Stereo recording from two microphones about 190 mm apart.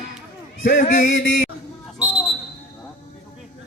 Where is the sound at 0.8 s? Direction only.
45° left (ahead or behind).